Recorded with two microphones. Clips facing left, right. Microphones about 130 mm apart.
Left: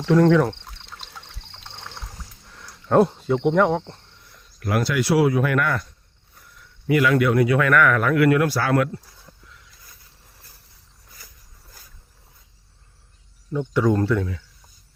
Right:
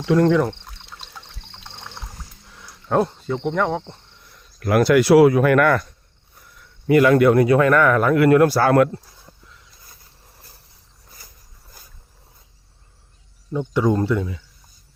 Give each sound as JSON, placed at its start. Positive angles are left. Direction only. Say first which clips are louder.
{"t": 0.0, "sound": "pour", "louder": "even", "side_deg": -5}
{"t": 2.5, "sound": "speech", "louder": "left 2 dB", "side_deg": -5}
{"t": 4.6, "sound": "speech", "louder": "right 7 dB", "side_deg": -60}
{"t": 6.8, "sound": "speech", "louder": "right 5 dB", "side_deg": -40}
{"t": 13.5, "sound": "speech", "louder": "right 1 dB", "side_deg": -20}